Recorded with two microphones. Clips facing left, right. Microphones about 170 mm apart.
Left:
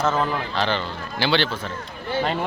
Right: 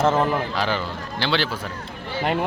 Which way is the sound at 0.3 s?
5° right (ahead or behind).